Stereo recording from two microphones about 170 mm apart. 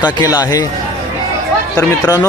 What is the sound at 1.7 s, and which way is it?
Speech, 20° left (ahead or behind).